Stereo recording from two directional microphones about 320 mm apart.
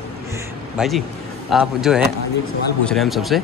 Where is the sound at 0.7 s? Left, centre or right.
Centre.